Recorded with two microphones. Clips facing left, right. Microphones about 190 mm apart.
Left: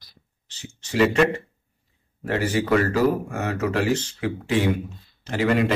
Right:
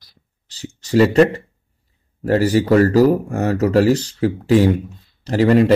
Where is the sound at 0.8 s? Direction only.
35° right (ahead or behind).